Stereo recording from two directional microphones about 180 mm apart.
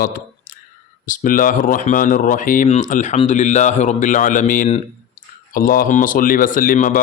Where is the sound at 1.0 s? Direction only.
50° left (ahead or behind).